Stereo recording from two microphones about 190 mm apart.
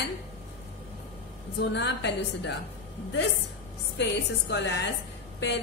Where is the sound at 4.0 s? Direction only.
65° left (ahead or behind).